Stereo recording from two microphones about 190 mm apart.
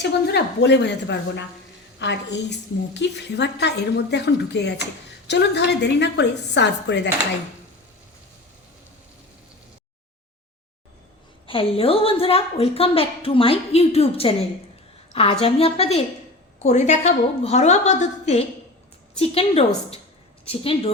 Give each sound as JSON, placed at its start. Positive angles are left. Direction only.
{"t": 0.0, "sound": "a woman's voice", "side_deg": 60}
{"t": 11.4, "sound": "a woman's voice", "side_deg": 30}